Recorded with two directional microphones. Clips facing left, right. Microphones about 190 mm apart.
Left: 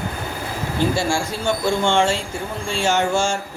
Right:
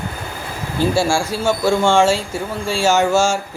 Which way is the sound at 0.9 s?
10° right (ahead or behind).